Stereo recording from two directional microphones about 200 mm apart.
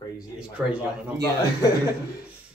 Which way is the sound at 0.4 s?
5° right (ahead or behind).